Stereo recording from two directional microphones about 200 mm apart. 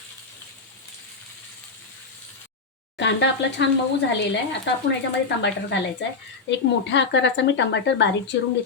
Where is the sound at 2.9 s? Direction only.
65° left (ahead or behind).